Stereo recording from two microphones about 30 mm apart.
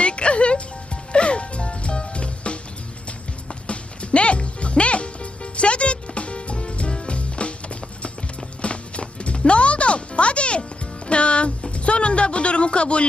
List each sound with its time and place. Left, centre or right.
0.0 s music: left
8.6 s clip-clop: left
11.1 s music: left
11.7 s a sound: left